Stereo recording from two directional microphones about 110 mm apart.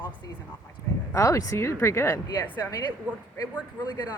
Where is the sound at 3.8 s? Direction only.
40° left (ahead or behind).